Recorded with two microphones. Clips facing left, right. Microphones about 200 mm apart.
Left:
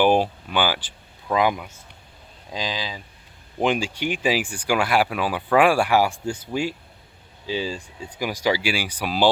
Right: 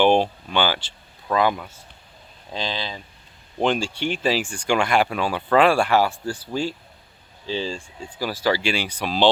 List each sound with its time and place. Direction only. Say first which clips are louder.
0.0 s speech: right 1 dB; 5° left (ahead or behind)